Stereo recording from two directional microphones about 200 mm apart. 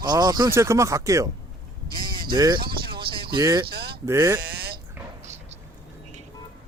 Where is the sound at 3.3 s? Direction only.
20° right (ahead or behind).